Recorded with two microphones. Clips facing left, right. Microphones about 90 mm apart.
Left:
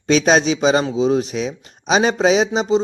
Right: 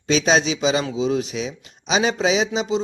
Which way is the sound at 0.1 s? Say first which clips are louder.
Left 4 dB; 50° left (ahead or behind).